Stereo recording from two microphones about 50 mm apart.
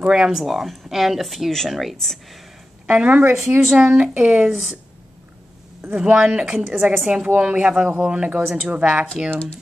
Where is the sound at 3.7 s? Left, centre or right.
Right.